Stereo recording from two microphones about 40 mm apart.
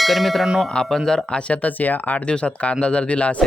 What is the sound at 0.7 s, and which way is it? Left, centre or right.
Speech, centre.